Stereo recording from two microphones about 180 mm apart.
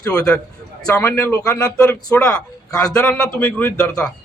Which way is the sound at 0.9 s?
15° left (ahead or behind).